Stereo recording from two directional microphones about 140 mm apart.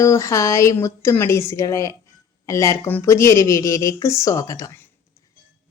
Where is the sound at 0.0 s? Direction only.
20° left (ahead or behind).